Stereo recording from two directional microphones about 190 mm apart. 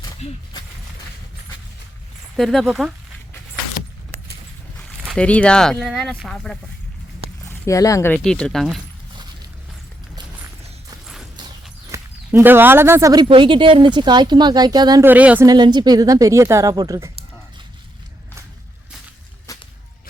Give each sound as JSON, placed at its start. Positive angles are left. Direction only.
{"t": 2.3, "sound": "speech", "side_deg": 0}
{"t": 5.0, "sound": "speech", "side_deg": 5}
{"t": 7.6, "sound": "speech", "side_deg": 15}
{"t": 8.1, "sound": "speech", "side_deg": 5}
{"t": 11.0, "sound": "clip-clop", "side_deg": 0}
{"t": 11.9, "sound": "speech", "side_deg": -10}
{"t": 13.2, "sound": "speech", "side_deg": -25}
{"t": 15.1, "sound": "a woman's voice", "side_deg": -10}
{"t": 15.4, "sound": "speech", "side_deg": -25}
{"t": 19.5, "sound": "whip", "side_deg": 15}